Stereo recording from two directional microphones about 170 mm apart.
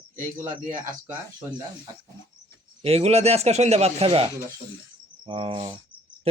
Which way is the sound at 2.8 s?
35° right (ahead or behind).